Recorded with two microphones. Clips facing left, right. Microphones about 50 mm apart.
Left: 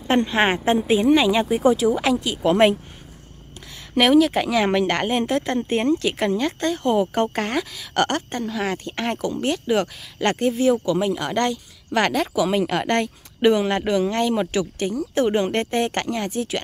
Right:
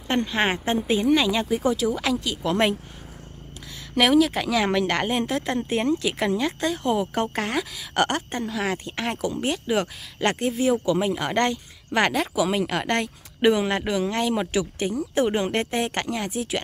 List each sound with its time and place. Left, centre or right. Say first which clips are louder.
0.1 s speech: left 4 dB; centre
3.9 s speech: left 3 dB; centre